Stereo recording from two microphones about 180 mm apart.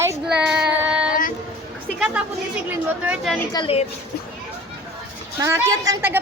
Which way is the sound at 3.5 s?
30° left (ahead or behind).